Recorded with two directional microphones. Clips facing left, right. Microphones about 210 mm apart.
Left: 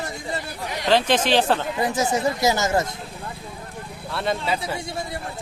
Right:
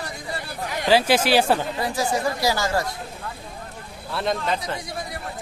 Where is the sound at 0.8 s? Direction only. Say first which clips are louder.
Right 1 dB; 5° right (ahead or behind).